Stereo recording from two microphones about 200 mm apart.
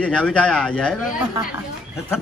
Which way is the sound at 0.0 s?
5° left (ahead or behind).